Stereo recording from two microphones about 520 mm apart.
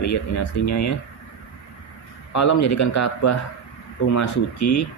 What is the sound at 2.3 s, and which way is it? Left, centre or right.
A man's voice, left.